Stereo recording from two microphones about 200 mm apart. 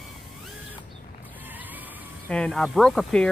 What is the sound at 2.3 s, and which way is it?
Speech, 5° left (ahead or behind).